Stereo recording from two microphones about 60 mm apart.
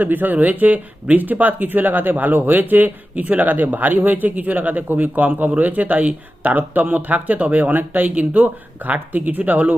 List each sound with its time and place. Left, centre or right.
0.0 s speech: right